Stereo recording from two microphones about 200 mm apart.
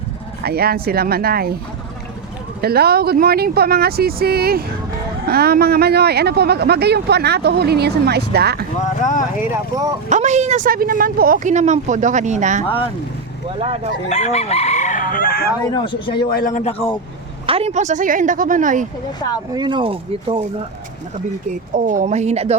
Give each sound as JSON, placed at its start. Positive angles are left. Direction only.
{"t": 0.4, "sound": "a man's voice", "side_deg": -50}
{"t": 2.6, "sound": "a man's voice", "side_deg": -50}
{"t": 9.0, "sound": "a man's voice", "side_deg": 40}
{"t": 9.4, "sound": "speech", "side_deg": -15}
{"t": 10.1, "sound": "a woman's voice", "side_deg": -35}
{"t": 14.1, "sound": "chicken", "side_deg": 35}
{"t": 15.6, "sound": "speech", "side_deg": 20}
{"t": 16.3, "sound": "a man's voice", "side_deg": 40}
{"t": 17.4, "sound": "a woman's voice", "side_deg": -30}
{"t": 19.5, "sound": "speech", "side_deg": -20}
{"t": 21.8, "sound": "a woman's voice", "side_deg": -40}